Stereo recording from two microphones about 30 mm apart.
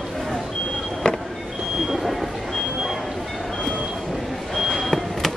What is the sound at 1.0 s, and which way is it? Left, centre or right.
Vehicle, left.